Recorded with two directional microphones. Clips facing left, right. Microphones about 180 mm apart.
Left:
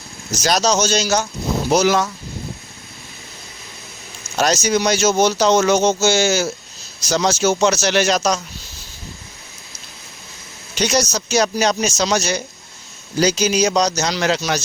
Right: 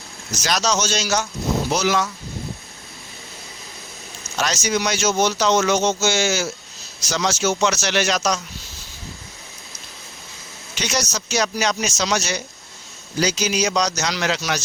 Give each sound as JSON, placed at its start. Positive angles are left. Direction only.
{"t": 0.3, "sound": "speech", "side_deg": 35}
{"t": 4.4, "sound": "speech", "side_deg": 40}
{"t": 10.8, "sound": "speech", "side_deg": 35}